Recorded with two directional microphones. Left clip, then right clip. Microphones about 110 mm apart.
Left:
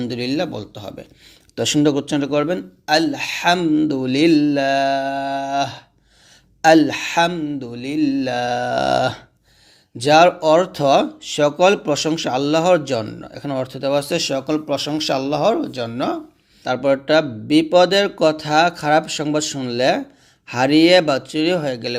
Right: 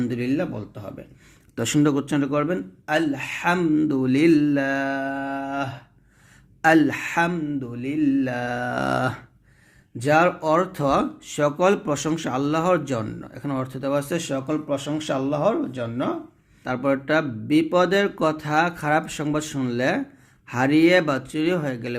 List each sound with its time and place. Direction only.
0.1 s speech: 15° left (ahead or behind)
1.5 s speech: 10° right (ahead or behind)
2.6 s speech: 20° left (ahead or behind)
3.6 s speech: 5° right (ahead or behind); by 5.8 s 20° left (ahead or behind)
6.6 s speech: 5° right (ahead or behind)
7.6 s speech: 20° left (ahead or behind); by 9.2 s 5° right (ahead or behind)
10.0 s speech: 10° left (ahead or behind)
14.3 s speech: 25° left (ahead or behind)
16.6 s speech: centre (ahead or behind)